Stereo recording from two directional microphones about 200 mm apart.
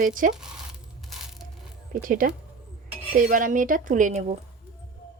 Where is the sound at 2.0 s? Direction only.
45° right (ahead or behind).